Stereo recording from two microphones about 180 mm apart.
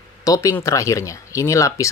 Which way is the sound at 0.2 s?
20° left (ahead or behind).